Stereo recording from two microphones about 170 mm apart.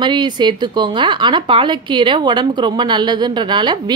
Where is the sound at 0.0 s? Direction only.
25° right (ahead or behind).